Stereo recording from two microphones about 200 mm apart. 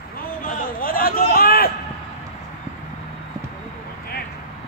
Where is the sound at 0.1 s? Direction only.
45° left (ahead or behind).